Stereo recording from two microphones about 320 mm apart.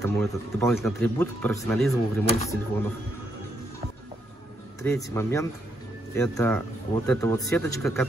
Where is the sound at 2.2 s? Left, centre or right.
Centre.